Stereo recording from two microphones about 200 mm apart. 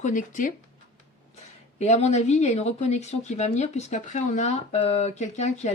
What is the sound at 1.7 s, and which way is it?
Speech, 35° left (ahead or behind).